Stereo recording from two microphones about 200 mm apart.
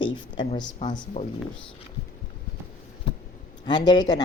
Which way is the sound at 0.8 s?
35° left (ahead or behind).